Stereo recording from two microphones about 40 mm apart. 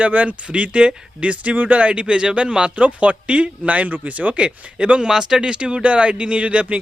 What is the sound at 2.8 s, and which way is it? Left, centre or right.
Speech, right.